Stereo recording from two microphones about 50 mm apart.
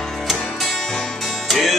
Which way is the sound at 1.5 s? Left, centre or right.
Centre.